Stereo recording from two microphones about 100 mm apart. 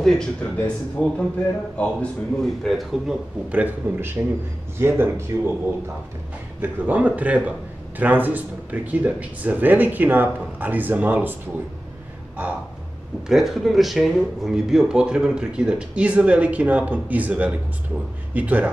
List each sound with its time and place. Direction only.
0.0 s a man's voice: 5° left (ahead or behind)
3.4 s speech: 15° right (ahead or behind)
6.6 s speech: 15° right (ahead or behind)
13.3 s speech: 5° right (ahead or behind)